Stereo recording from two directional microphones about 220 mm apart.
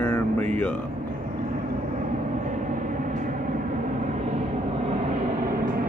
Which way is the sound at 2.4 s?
35° right (ahead or behind).